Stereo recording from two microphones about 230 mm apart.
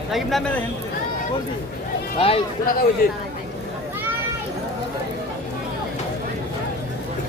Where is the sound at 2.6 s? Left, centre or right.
Left.